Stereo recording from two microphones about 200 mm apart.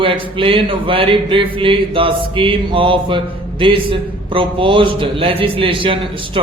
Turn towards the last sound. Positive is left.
turn(degrees=-25)  # may be behind; listen again after turning